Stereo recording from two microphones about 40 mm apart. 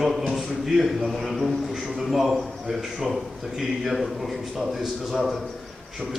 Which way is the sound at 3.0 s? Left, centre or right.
Centre.